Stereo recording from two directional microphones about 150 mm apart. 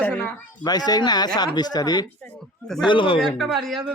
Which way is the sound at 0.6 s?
25° left (ahead or behind).